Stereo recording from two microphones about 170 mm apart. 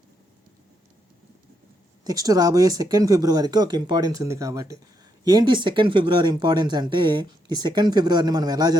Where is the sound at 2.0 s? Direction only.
20° right (ahead or behind).